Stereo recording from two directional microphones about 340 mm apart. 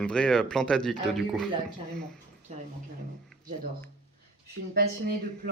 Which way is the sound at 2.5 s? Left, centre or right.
Centre.